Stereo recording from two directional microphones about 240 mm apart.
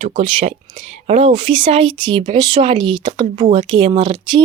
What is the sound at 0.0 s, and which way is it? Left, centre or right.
Speech, right.